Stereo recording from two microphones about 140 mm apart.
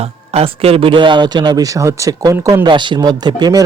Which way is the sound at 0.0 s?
45° right (ahead or behind).